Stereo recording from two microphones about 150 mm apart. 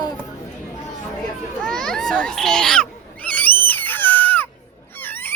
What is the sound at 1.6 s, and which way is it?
Children playing, 5° left (ahead or behind).